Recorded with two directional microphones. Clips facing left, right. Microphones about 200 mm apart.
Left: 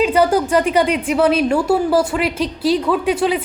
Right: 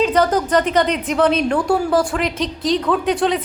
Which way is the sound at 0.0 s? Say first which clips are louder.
Left 2 dB; 10° left (ahead or behind).